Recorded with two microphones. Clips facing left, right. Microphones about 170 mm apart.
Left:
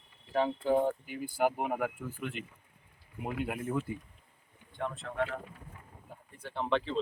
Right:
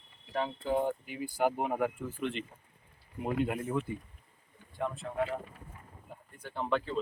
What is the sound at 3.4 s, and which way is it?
Speech, 5° left (ahead or behind).